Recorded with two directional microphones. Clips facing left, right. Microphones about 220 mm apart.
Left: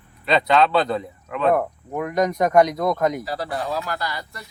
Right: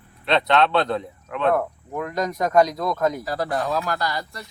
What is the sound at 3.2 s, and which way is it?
Speech, 50° right (ahead or behind).